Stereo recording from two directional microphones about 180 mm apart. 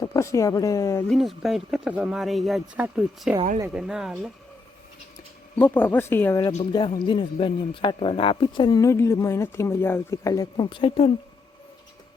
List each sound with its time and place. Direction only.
0.0 s speech: 15° left (ahead or behind)
1.0 s speech: centre (ahead or behind)
5.5 s speech: 10° left (ahead or behind)
7.0 s speech: 25° left (ahead or behind)